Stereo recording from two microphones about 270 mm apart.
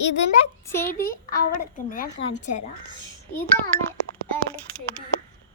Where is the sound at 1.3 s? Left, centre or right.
Left.